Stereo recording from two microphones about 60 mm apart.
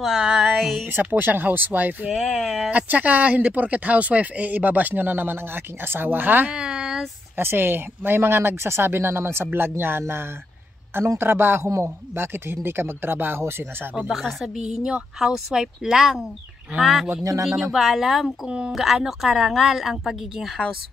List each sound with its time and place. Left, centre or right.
0.0 s a sound: centre
0.8 s speech: right
2.0 s speech: centre
2.7 s speech: right
6.5 s a sound: centre
7.3 s speech: right
14.4 s speech: centre
17.2 s speech: right
17.7 s speech: centre